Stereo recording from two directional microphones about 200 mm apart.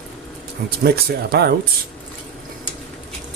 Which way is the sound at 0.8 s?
50° right (ahead or behind).